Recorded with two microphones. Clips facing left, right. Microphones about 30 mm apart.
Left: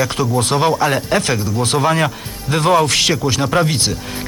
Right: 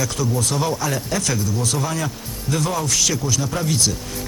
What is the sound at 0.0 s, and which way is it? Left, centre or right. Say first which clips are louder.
Speech: left 5 dB; left.